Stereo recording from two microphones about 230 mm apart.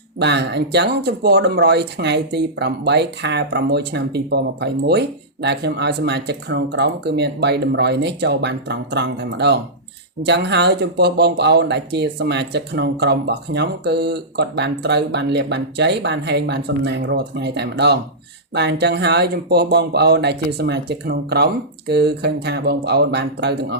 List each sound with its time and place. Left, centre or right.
0.2 s speech: right